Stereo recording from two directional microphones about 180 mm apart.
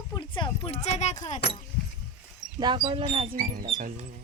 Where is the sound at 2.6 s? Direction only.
25° right (ahead or behind).